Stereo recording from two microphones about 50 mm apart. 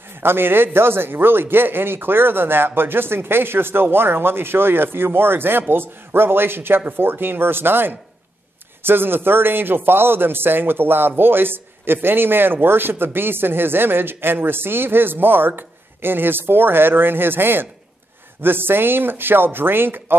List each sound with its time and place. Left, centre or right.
0.2 s a man's voice: right